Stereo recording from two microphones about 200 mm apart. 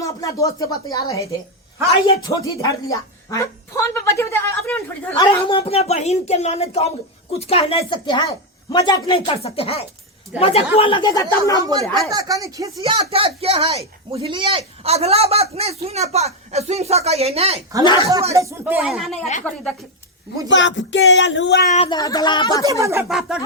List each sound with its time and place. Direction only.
0.0 s speech: 15° left (ahead or behind)
5.1 s speech: 25° left (ahead or behind)
11.9 s speech: centre (ahead or behind)
12.1 s speech: 15° right (ahead or behind)
12.8 s speech: 30° right (ahead or behind)
18.3 s speech: 10° right (ahead or behind); by 19.7 s 5° left (ahead or behind)
20.5 s a sound: 65° left (ahead or behind)
21.7 s speech: 25° left (ahead or behind)
22.6 s speech: 15° right (ahead or behind)
23.0 s speech: centre (ahead or behind)